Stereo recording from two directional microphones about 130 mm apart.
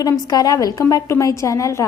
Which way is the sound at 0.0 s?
30° left (ahead or behind).